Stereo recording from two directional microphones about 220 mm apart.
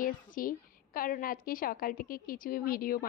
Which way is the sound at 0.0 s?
40° left (ahead or behind).